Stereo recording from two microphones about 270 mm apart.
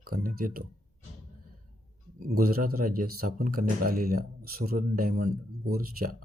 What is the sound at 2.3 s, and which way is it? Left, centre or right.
Speech, right.